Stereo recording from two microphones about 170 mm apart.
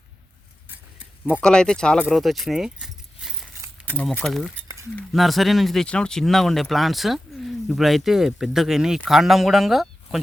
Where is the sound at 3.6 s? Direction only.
20° right (ahead or behind).